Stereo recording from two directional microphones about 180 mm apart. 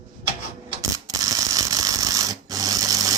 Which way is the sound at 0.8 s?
20° right (ahead or behind).